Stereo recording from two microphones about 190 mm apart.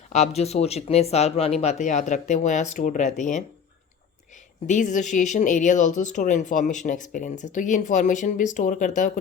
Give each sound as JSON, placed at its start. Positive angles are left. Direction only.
{"t": 0.1, "sound": "speech", "side_deg": 35}
{"t": 4.6, "sound": "speech", "side_deg": 40}